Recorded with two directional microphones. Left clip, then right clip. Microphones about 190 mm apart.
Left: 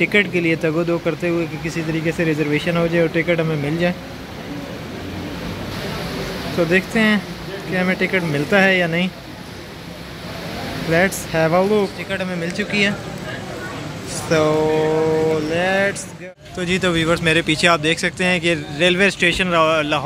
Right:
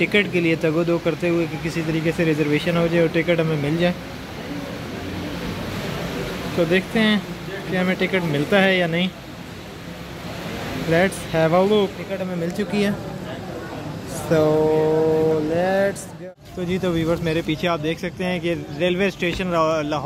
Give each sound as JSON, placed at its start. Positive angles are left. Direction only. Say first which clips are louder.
{"t": 0.0, "sound": "speech", "louder": "left 2 dB", "side_deg": 0}
{"t": 6.7, "sound": "speech", "louder": "left 4 dB", "side_deg": -5}
{"t": 10.9, "sound": "speech", "louder": "left 2 dB", "side_deg": -5}
{"t": 12.4, "sound": "speech", "louder": "left 5 dB", "side_deg": -20}
{"t": 14.5, "sound": "speech", "louder": "left 1 dB", "side_deg": 0}
{"t": 15.5, "sound": "speech", "louder": "left 2 dB", "side_deg": -15}